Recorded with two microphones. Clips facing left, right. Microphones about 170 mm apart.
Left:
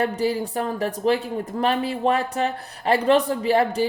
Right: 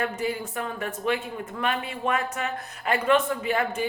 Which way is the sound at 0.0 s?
35° left (ahead or behind).